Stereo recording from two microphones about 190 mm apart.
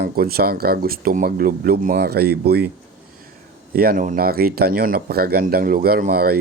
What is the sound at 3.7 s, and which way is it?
Speech, 50° right (ahead or behind).